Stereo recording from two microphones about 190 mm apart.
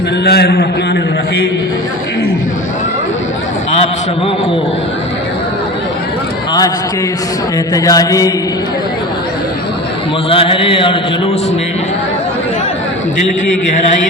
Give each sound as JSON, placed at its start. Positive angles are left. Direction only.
{"t": 0.3, "sound": "a man's voice", "side_deg": 55}
{"t": 7.7, "sound": "mantra", "side_deg": 20}
{"t": 10.2, "sound": "mantra", "side_deg": 30}